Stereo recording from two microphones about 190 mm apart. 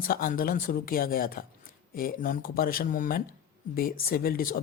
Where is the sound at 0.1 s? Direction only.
45° left (ahead or behind).